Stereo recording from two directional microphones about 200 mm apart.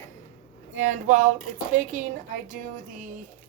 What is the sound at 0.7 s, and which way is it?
Speech, 40° right (ahead or behind).